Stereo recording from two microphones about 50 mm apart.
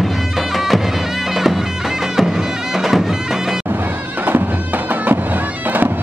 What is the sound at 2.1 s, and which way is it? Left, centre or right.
Music, centre.